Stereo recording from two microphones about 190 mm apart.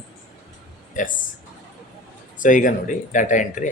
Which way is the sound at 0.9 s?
40° left (ahead or behind).